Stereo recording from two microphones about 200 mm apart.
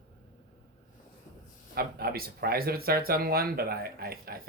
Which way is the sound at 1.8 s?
50° right (ahead or behind).